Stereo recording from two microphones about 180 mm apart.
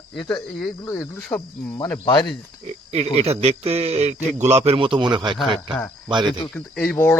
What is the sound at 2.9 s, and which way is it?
A man's voice, 35° right (ahead or behind).